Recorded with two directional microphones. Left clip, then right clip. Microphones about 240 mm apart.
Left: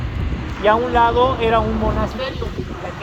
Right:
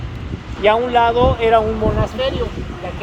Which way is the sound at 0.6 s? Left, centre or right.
Right.